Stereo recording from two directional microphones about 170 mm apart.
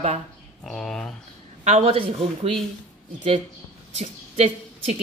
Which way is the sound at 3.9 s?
40° right (ahead or behind).